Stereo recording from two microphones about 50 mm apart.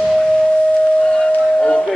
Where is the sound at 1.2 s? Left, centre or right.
Left.